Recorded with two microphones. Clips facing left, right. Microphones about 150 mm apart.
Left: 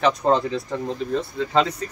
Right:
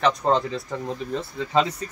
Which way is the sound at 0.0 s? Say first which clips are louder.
Left 2 dB; centre (ahead or behind).